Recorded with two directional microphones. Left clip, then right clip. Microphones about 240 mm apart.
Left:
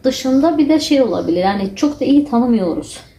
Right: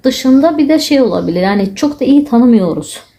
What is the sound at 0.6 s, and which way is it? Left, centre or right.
A woman's voice, right.